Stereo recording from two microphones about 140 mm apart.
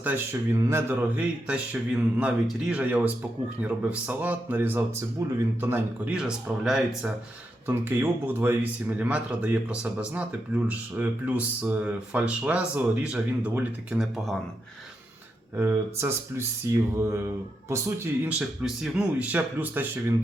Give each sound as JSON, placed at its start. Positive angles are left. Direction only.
{"t": 0.0, "sound": "speech", "side_deg": -15}
{"t": 7.7, "sound": "speech", "side_deg": -15}
{"t": 15.5, "sound": "speech", "side_deg": -15}